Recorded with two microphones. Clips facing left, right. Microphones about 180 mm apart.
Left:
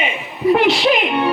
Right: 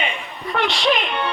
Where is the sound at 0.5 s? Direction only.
5° left (ahead or behind).